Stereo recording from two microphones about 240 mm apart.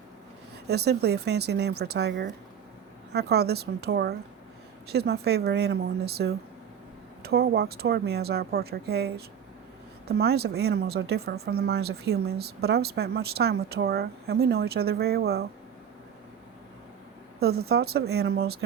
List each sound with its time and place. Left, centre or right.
0.7 s speech: right
17.4 s speech: right